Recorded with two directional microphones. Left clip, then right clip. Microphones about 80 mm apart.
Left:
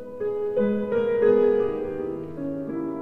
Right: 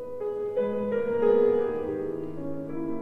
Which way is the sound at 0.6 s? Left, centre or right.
Left.